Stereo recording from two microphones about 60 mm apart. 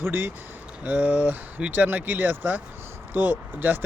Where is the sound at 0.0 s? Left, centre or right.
Right.